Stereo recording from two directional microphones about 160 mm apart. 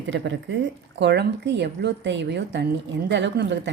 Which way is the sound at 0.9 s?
90° right.